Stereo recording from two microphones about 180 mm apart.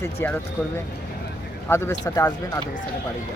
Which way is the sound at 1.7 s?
15° left (ahead or behind).